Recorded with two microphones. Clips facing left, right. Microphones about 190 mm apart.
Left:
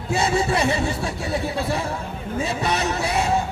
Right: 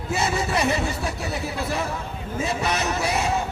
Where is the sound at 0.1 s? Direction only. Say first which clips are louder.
Left 3 dB; 30° left (ahead or behind).